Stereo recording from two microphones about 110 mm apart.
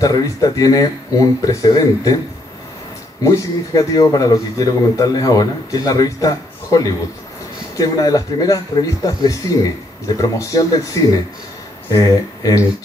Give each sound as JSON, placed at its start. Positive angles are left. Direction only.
{"t": 0.0, "sound": "a man's voice", "side_deg": 35}
{"t": 3.2, "sound": "a man's voice", "side_deg": 30}